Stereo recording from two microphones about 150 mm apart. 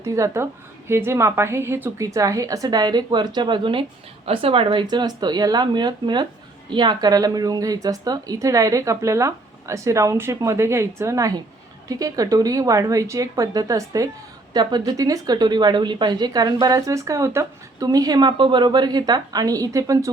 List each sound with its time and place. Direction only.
0.0 s speech: 20° right (ahead or behind)